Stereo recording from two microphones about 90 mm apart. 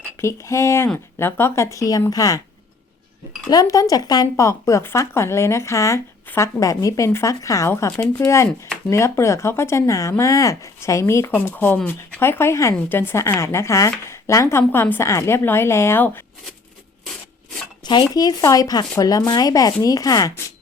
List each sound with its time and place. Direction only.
0.2 s speech: 30° left (ahead or behind)
3.5 s a woman's voice: 45° left (ahead or behind); by 16.2 s 25° left (ahead or behind)
17.8 s speech: 50° left (ahead or behind)